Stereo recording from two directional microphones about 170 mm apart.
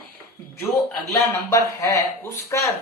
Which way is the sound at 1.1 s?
15° left (ahead or behind).